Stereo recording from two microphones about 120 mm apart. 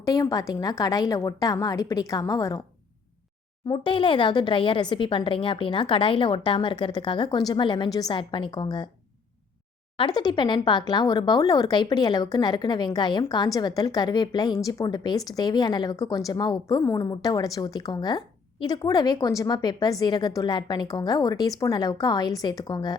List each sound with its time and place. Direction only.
0.0 s a woman's voice: 30° left (ahead or behind)
3.7 s a woman's voice: 45° left (ahead or behind)
10.2 s a woman's voice: 40° left (ahead or behind)